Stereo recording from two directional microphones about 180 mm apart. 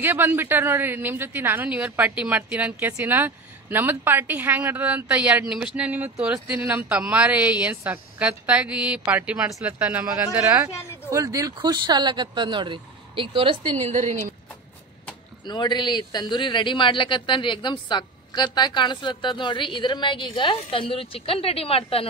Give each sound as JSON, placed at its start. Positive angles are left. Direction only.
{"t": 0.0, "sound": "speech", "side_deg": -10}
{"t": 13.8, "sound": "speech", "side_deg": -40}
{"t": 15.4, "sound": "speech", "side_deg": 25}